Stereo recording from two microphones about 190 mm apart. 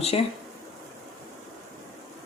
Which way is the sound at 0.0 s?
30° left (ahead or behind).